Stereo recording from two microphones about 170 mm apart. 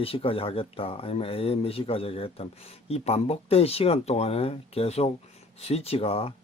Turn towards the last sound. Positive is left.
turn(degrees=35)  # may be behind; listen again after turning